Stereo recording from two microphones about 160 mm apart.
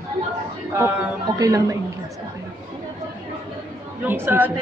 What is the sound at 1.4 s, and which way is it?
Speech, 20° right (ahead or behind).